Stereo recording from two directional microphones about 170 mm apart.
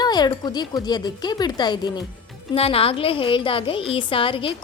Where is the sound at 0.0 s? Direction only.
25° left (ahead or behind).